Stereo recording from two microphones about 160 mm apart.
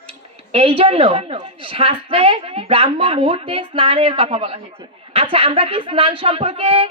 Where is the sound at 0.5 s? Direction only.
35° right (ahead or behind).